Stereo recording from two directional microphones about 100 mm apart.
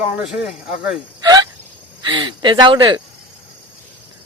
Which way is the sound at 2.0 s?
50° right (ahead or behind).